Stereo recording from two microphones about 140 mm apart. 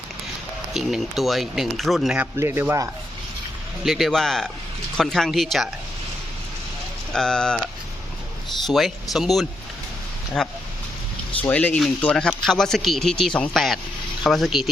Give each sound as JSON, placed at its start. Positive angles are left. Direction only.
{"t": 0.7, "sound": "speech", "side_deg": 0}
{"t": 2.3, "sound": "speech", "side_deg": -15}
{"t": 3.8, "sound": "speech", "side_deg": 0}
{"t": 7.1, "sound": "speech", "side_deg": 5}
{"t": 8.6, "sound": "speech", "side_deg": 0}